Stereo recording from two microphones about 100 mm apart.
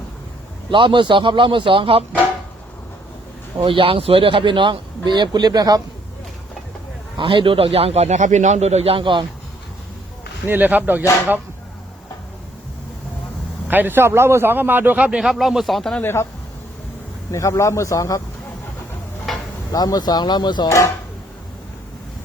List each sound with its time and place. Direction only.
0.7 s speech: 55° right (ahead or behind)
3.6 s speech: 65° right (ahead or behind); by 5.8 s 40° right (ahead or behind)
7.2 s a man's voice: 60° right (ahead or behind)
10.4 s a man's voice: 20° right (ahead or behind)
13.7 s a man's voice: 20° right (ahead or behind); by 16.0 s centre (ahead or behind)
16.0 s speech: 20° left (ahead or behind)
17.3 s speech: 30° left (ahead or behind)
19.3 s a sound: centre (ahead or behind)
19.7 s speech: 40° left (ahead or behind)
20.7 s speech: 30° left (ahead or behind)